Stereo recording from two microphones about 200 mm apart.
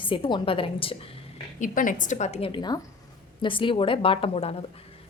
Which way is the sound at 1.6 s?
40° left (ahead or behind).